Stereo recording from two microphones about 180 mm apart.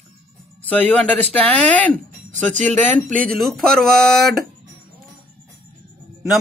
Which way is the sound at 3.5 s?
5° left (ahead or behind).